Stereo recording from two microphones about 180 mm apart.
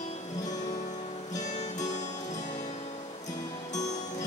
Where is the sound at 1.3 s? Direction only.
40° left (ahead or behind).